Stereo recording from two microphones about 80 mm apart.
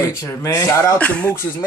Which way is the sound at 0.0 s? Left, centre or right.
Left.